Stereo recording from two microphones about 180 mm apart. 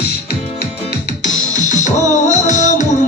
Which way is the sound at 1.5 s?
45° left (ahead or behind).